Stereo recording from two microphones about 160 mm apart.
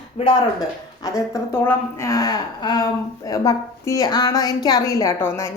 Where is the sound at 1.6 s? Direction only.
20° left (ahead or behind).